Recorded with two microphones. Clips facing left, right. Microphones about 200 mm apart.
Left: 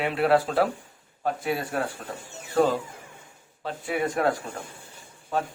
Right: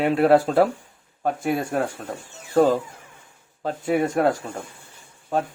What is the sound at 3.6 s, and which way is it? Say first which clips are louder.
Speech: right 6 dB; 40° right (ahead or behind).